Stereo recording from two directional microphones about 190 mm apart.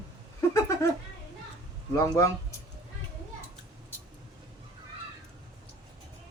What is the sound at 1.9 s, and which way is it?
Speech, 15° left (ahead or behind).